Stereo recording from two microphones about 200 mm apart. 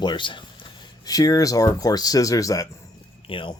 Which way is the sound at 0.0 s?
25° left (ahead or behind).